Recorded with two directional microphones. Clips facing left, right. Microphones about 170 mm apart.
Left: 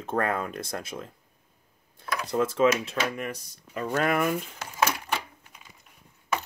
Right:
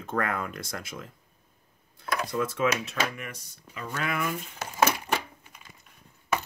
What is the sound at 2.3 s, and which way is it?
Speech, 30° left (ahead or behind).